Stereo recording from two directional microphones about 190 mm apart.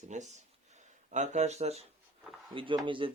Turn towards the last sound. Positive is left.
turn(degrees=-25)  # may be behind; listen again after turning